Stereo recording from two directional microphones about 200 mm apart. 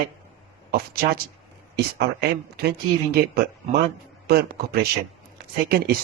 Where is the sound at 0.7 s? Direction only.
50° right (ahead or behind).